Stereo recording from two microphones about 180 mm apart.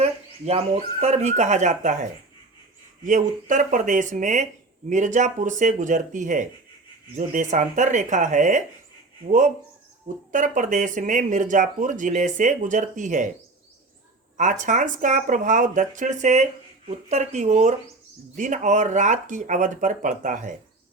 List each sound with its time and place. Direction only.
0.0 s speech: 35° right (ahead or behind)
10.3 s speech: 45° right (ahead or behind)
14.3 s speech: 45° right (ahead or behind)